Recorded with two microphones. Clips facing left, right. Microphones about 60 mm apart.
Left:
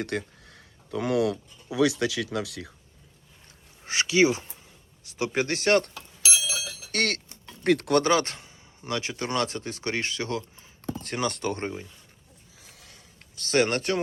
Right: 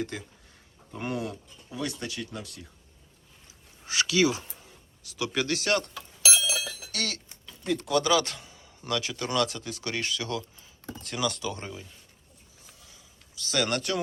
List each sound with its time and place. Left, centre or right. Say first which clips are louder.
0.0 s speech: left 4 dB; left
3.8 s speech: left 3 dB; left
6.9 s a sound: left 9 dB; left
8.0 s speech: left 2 dB; left
12.7 s a sound: left 3 dB; left
13.6 s speech: left 4 dB; left